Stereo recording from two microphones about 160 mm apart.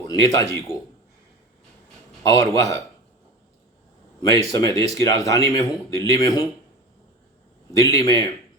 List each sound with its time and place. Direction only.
0.0 s speech: 25° left (ahead or behind)
2.2 s speech: 20° left (ahead or behind)
4.3 s speech: 20° left (ahead or behind)
7.8 s speech: 20° left (ahead or behind)